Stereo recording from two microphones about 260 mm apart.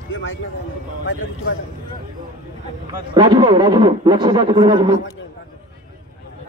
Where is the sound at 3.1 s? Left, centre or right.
Centre.